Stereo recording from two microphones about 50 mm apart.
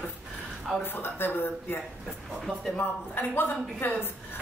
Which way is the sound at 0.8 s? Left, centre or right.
Left.